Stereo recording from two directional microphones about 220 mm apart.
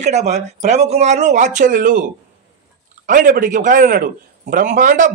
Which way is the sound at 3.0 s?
40° right (ahead or behind).